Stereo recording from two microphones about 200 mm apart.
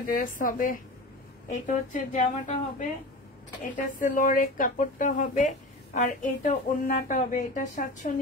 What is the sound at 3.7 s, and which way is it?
A woman's voice, 40° left (ahead or behind).